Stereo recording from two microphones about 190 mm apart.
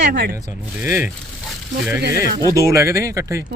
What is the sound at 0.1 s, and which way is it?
Speech, 65° right (ahead or behind).